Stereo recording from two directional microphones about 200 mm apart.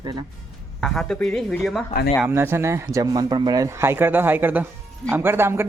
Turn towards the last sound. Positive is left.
turn(degrees=-10)  # may be behind; listen again after turning